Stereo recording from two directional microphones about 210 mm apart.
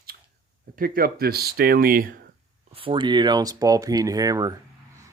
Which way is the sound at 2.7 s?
25° right (ahead or behind).